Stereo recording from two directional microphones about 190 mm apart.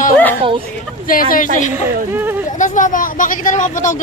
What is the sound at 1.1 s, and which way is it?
Speech, 45° left (ahead or behind).